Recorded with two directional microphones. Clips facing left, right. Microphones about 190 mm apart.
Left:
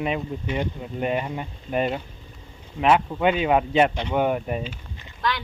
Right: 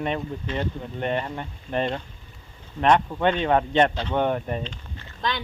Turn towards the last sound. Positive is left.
turn(degrees=-25)  # may be behind; listen again after turning